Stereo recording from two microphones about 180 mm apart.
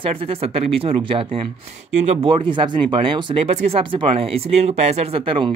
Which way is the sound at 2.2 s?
25° right (ahead or behind).